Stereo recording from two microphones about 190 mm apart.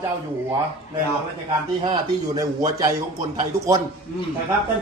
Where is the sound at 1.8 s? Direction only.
20° right (ahead or behind).